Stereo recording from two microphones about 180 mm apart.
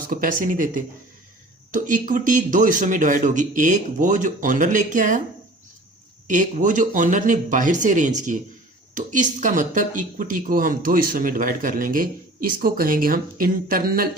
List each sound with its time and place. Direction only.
0.1 s speech: 50° right (ahead or behind)
6.2 s speech: 45° right (ahead or behind)